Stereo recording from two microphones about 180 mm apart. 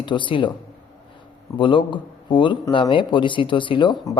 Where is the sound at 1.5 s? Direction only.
25° left (ahead or behind).